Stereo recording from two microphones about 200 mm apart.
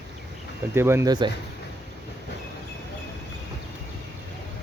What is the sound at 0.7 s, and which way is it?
Speech, 10° right (ahead or behind).